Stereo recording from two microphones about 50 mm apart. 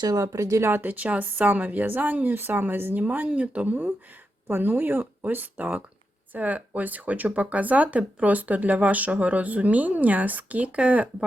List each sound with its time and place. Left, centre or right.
0.2 s speech: right
0.7 s speech: right
3.2 s speech: right